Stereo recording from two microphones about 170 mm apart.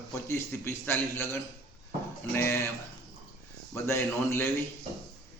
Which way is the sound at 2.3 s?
15° left (ahead or behind).